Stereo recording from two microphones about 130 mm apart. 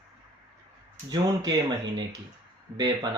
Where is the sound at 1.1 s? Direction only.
35° right (ahead or behind).